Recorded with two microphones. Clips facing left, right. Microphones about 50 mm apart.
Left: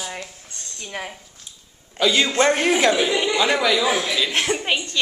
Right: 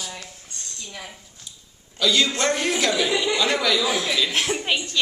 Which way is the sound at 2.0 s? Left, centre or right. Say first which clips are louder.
Left 3 dB; left.